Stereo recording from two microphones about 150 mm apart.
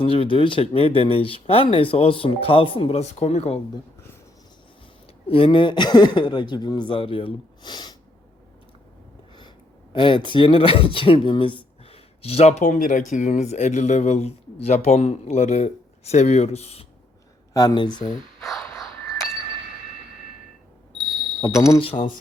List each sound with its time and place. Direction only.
0.0 s speech: 35° left (ahead or behind)
5.3 s speech: 35° left (ahead or behind)
9.9 s speech: 35° left (ahead or behind)
17.5 s speech: 25° left (ahead or behind)
18.1 s a sound: centre (ahead or behind)
21.4 s speech: 35° left (ahead or behind)